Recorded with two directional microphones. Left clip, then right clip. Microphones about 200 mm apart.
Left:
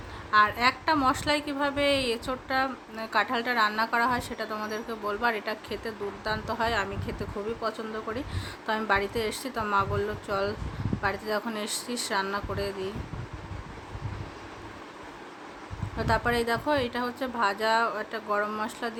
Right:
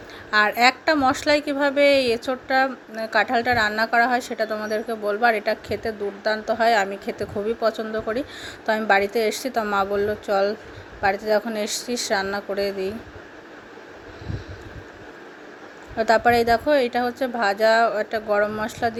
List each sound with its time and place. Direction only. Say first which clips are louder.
0.3 s a woman's voice: right 5 dB; 25° right (ahead or behind)
16.0 s a woman's voice: right 9 dB; 20° right (ahead or behind)